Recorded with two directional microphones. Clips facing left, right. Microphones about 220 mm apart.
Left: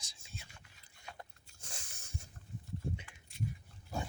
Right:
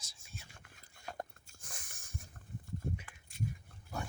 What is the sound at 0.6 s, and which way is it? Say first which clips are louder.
Dog: right 5 dB; 50° right (ahead or behind).